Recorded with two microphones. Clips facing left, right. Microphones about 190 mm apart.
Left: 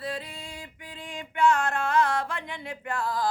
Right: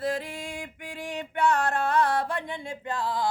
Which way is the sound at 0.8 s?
80° right.